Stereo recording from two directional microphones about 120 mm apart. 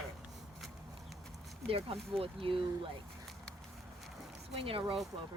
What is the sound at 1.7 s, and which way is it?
Speech, 50° right (ahead or behind).